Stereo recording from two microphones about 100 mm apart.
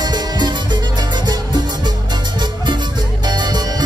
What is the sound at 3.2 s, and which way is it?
Music, 45° right (ahead or behind).